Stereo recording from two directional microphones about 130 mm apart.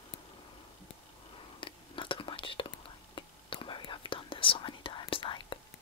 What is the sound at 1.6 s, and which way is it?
Whispering, 40° left (ahead or behind).